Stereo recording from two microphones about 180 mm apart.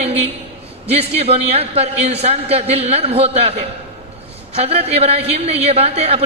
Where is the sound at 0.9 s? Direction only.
35° right (ahead or behind).